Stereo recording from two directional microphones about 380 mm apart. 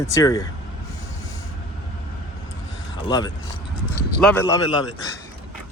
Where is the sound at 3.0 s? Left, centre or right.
Centre.